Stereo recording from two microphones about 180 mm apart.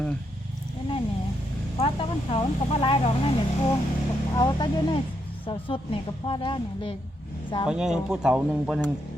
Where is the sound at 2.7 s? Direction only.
30° left (ahead or behind).